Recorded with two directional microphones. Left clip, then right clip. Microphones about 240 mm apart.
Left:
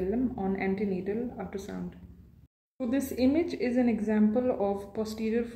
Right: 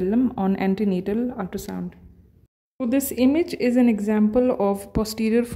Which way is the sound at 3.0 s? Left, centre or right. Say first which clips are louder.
Right 5 dB; right.